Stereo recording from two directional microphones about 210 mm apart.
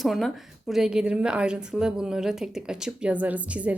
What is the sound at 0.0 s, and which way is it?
A woman's voice, centre (ahead or behind).